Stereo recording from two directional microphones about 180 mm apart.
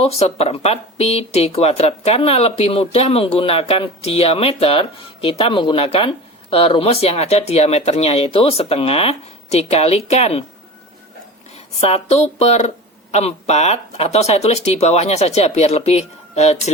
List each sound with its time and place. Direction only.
0.0 s speech: 35° left (ahead or behind)
11.8 s speech: 35° left (ahead or behind)